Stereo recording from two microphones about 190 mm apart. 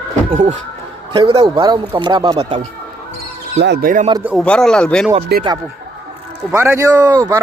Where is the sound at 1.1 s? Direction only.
30° right (ahead or behind).